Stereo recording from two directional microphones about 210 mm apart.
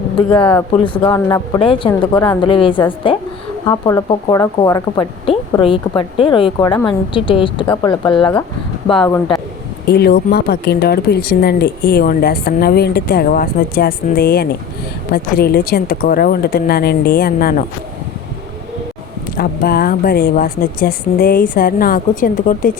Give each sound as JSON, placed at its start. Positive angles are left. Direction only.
{"t": 0.3, "sound": "speech", "side_deg": 25}
{"t": 9.9, "sound": "speech", "side_deg": 50}
{"t": 19.4, "sound": "speech", "side_deg": 45}